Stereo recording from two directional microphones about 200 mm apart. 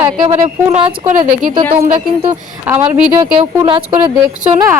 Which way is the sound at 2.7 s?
10° right (ahead or behind).